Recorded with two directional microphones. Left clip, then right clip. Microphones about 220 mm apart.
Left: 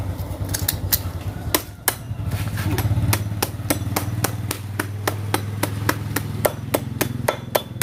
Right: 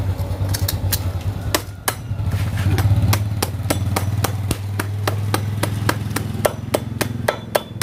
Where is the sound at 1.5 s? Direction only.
Centre (ahead or behind).